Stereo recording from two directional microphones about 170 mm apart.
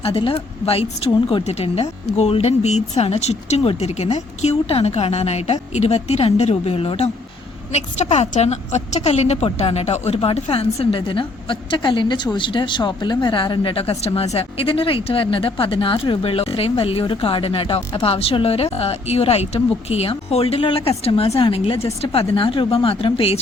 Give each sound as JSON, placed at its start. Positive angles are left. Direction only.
{"t": 0.0, "sound": "speech", "side_deg": 35}